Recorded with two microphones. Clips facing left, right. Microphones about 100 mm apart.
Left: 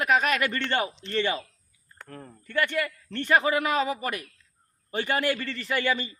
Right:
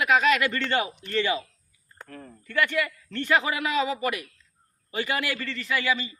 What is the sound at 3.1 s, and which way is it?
Speech, 30° left (ahead or behind).